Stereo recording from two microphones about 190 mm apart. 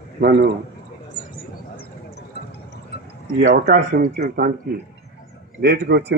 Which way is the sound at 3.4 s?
55° right (ahead or behind).